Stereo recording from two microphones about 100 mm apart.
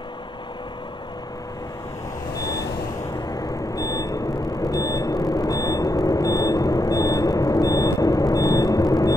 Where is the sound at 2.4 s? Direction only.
35° left (ahead or behind).